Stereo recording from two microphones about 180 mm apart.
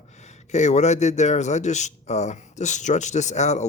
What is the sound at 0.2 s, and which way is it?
A man's voice, 40° left (ahead or behind).